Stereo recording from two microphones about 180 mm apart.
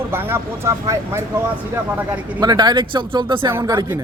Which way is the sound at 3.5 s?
15° right (ahead or behind).